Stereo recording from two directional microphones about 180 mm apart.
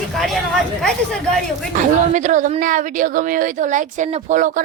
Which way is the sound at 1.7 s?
45° right (ahead or behind).